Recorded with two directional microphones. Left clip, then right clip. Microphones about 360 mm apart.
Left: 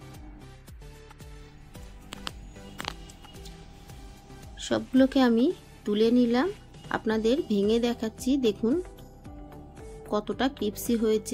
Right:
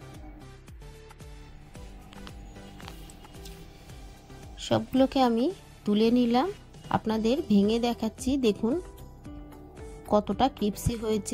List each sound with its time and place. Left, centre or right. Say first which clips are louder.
4.6 s speech: left 1 dB; right
10.0 s speech: right 4 dB; centre